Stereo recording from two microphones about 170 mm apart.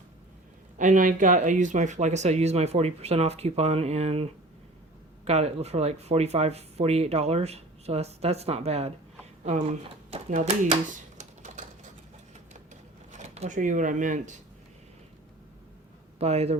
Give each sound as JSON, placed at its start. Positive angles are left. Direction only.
{"t": 0.8, "sound": "speech", "side_deg": -50}
{"t": 9.4, "sound": "typewriter", "side_deg": -40}
{"t": 13.1, "sound": "speech", "side_deg": -45}
{"t": 16.1, "sound": "speech", "side_deg": -40}